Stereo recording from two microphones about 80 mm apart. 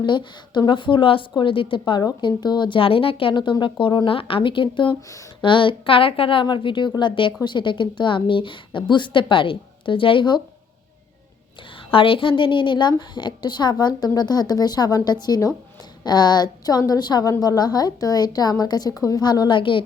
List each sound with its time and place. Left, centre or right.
0.0 s speech: left
0.7 s a woman's voice: left
11.9 s a woman's voice: left